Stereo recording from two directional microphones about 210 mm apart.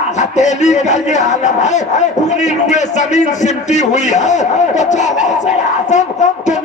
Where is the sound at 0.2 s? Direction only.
35° left (ahead or behind).